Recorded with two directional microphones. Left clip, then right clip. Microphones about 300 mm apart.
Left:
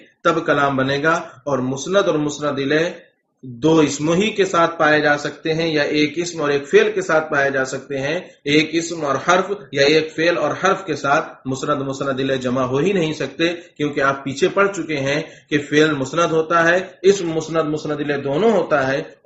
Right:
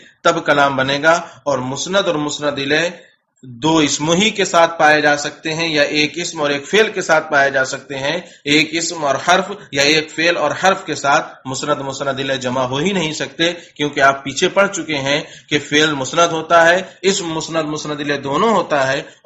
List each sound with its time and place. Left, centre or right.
0.2 s speech: right
12.1 s speech: right